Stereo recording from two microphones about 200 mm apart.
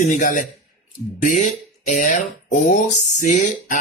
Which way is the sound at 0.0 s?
40° left (ahead or behind).